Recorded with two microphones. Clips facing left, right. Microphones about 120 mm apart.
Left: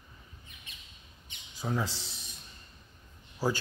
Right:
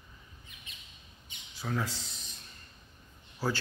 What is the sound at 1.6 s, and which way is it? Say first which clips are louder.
Speech: left 2 dB; 15° left (ahead or behind).